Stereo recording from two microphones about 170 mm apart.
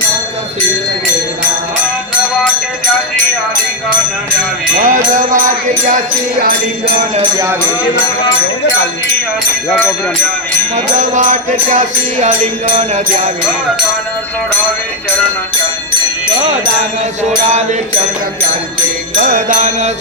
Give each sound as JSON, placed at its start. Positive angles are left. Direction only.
{"t": 4.8, "sound": "music", "side_deg": -50}
{"t": 7.2, "sound": "speech", "side_deg": -20}
{"t": 10.9, "sound": "music", "side_deg": -45}
{"t": 17.2, "sound": "music", "side_deg": -45}
{"t": 19.1, "sound": "music", "side_deg": -50}